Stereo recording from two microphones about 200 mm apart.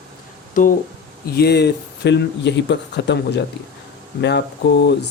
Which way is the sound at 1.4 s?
55° left (ahead or behind).